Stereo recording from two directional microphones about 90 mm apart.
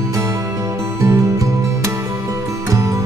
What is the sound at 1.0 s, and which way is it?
Music, 35° right (ahead or behind).